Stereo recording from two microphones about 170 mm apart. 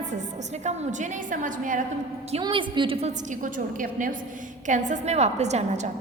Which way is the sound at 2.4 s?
30° right (ahead or behind).